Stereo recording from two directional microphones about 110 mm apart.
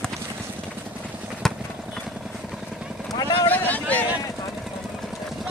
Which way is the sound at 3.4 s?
15° left (ahead or behind).